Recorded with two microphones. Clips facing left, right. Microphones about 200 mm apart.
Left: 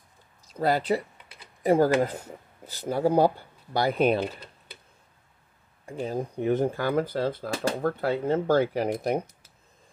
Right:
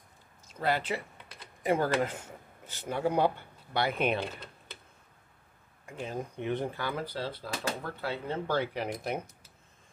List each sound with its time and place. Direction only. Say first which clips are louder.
0.5 s speech: left 6 dB; 40° left (ahead or behind)
5.9 s speech: left 7 dB; 35° left (ahead or behind)